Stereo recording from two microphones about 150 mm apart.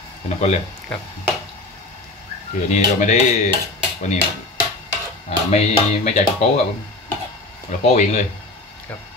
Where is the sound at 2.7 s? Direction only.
50° left (ahead or behind).